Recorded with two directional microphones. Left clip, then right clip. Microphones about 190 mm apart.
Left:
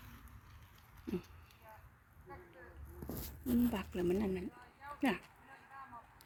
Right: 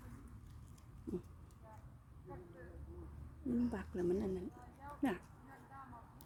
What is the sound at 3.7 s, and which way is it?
Speech, 5° left (ahead or behind).